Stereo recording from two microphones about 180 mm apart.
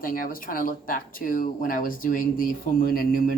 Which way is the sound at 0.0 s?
50° left (ahead or behind).